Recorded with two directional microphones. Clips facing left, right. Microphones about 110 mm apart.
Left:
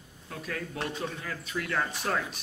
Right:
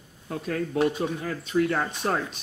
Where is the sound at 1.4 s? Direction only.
30° right (ahead or behind).